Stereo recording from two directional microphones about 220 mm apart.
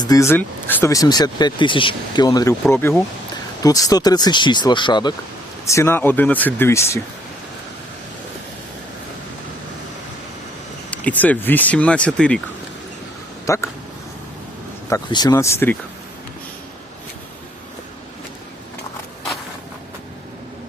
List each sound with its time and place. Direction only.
0.0 s speech: 15° left (ahead or behind)
10.9 s speech: 5° left (ahead or behind)
13.5 s speech: 15° left (ahead or behind)
14.8 s speech: 15° left (ahead or behind)